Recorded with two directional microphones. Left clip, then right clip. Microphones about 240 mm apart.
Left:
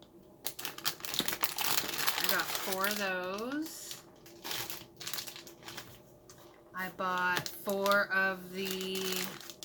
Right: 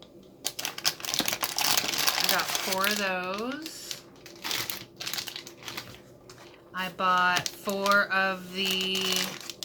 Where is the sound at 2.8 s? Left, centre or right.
Centre.